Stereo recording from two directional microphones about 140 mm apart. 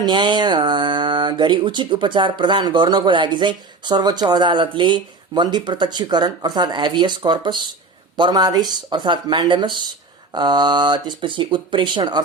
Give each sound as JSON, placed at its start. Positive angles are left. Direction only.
{"t": 0.0, "sound": "speech", "side_deg": -35}